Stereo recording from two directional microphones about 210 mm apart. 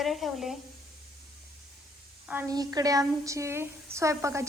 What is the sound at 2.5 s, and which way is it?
A woman's voice, 20° right (ahead or behind).